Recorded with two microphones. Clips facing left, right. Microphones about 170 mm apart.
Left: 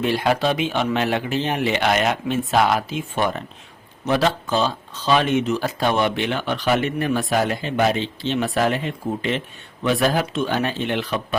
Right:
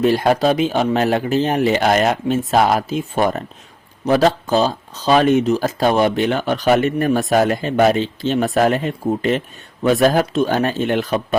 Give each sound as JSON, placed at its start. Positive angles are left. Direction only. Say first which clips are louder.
{"t": 0.0, "sound": "speech", "louder": "right 5 dB", "side_deg": -40}